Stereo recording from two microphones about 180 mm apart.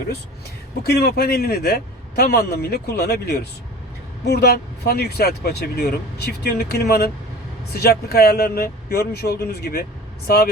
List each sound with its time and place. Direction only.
0.9 s speech: 65° left (ahead or behind)